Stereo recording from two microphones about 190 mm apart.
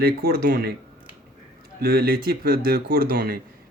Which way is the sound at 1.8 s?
50° right (ahead or behind).